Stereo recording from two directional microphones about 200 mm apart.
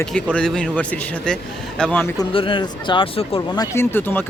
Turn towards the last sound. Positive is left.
turn(degrees=10)  # may be behind; listen again after turning